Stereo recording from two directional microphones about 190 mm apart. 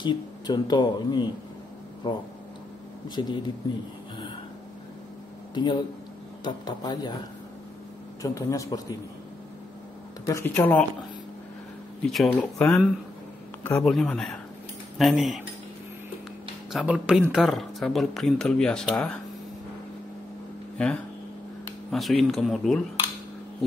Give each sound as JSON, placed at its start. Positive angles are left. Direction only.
{"t": 0.0, "sound": "speech", "side_deg": 20}
{"t": 3.2, "sound": "speech", "side_deg": 20}
{"t": 5.5, "sound": "speech", "side_deg": 25}
{"t": 8.2, "sound": "speech", "side_deg": 15}
{"t": 10.2, "sound": "speech", "side_deg": 15}
{"t": 12.0, "sound": "speech", "side_deg": 0}
{"t": 13.8, "sound": "speech", "side_deg": 5}
{"t": 16.7, "sound": "speech", "side_deg": -5}
{"t": 20.7, "sound": "speech", "side_deg": 5}